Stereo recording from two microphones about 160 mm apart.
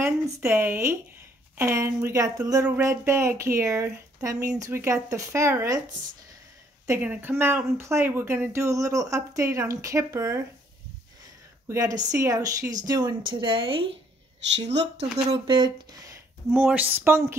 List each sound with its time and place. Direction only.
0.0 s speech: 15° right (ahead or behind)
6.9 s speech: 10° right (ahead or behind)
11.6 s a woman's voice: 20° right (ahead or behind)
14.5 s speech: 90° right
15.3 s speech: 30° right (ahead or behind)
16.5 s speech: 10° right (ahead or behind)